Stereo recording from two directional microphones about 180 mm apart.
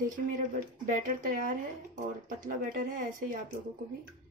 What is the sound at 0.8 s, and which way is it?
Speech, 50° right (ahead or behind).